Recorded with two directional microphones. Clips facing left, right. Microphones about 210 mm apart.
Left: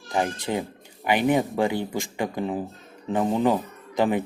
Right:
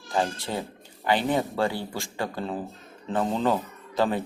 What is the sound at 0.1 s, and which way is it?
Speech, 15° left (ahead or behind).